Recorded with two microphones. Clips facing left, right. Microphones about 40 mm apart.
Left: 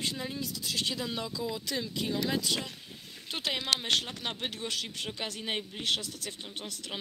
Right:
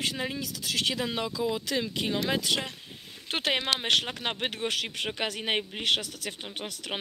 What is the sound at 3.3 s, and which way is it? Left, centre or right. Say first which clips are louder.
Speech: right 4 dB; right.